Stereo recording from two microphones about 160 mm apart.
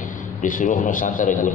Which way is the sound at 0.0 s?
55° left (ahead or behind).